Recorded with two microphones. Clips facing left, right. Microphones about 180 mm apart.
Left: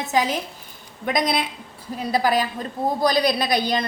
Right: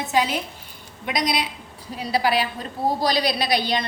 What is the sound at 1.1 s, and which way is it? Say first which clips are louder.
A woman's voice: left 2 dB; 50° left (ahead or behind).